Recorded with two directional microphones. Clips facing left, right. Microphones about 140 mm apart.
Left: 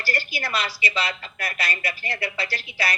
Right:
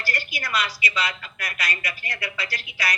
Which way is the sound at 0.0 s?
30° left (ahead or behind).